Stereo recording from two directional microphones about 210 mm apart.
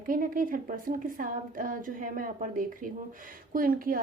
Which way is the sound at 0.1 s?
40° right (ahead or behind).